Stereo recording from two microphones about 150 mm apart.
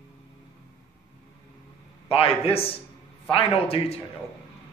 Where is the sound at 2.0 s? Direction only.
40° left (ahead or behind).